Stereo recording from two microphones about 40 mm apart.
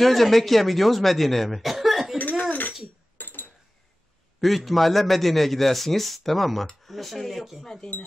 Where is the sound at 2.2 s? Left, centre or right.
Left.